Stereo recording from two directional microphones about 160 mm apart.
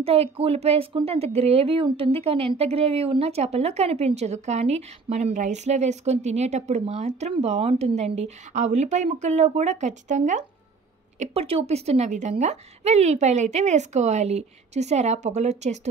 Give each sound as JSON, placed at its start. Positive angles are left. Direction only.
{"t": 0.0, "sound": "a woman's voice", "side_deg": -35}
{"t": 11.1, "sound": "a woman's voice", "side_deg": -40}